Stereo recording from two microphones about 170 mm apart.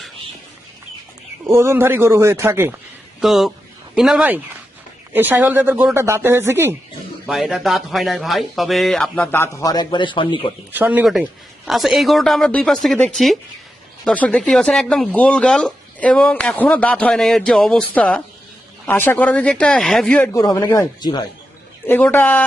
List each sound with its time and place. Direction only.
1.5 s a man's voice: 15° right (ahead or behind)
3.2 s speech: centre (ahead or behind)
7.3 s speech: centre (ahead or behind); by 10.5 s 30° left (ahead or behind)
10.7 s speech: 10° right (ahead or behind); by 20.3 s 5° left (ahead or behind)
20.3 s speech: 20° left (ahead or behind)
21.8 s speech: 10° left (ahead or behind)